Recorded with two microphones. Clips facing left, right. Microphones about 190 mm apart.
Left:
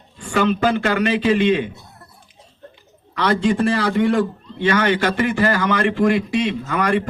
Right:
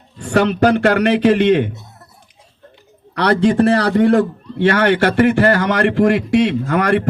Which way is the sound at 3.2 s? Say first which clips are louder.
Right 4 dB; 70° right (ahead or behind).